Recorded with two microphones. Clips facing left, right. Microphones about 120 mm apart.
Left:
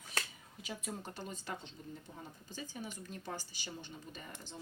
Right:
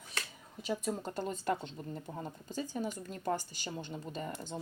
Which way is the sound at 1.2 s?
50° right (ahead or behind).